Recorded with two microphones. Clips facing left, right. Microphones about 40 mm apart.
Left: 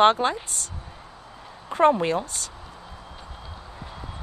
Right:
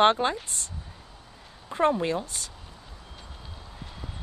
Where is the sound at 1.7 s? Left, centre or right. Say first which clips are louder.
Left 5 dB; left.